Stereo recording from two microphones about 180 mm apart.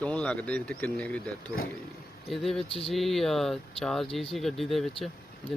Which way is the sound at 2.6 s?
30° left (ahead or behind).